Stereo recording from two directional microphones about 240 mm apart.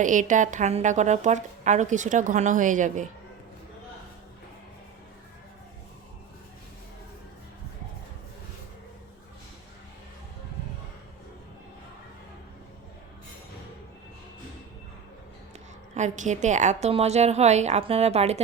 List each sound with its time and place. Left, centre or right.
0.0 s a woman's voice: right
16.0 s a woman's voice: right